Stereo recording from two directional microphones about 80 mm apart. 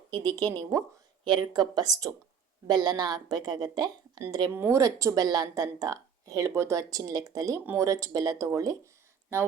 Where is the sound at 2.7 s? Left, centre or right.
Right.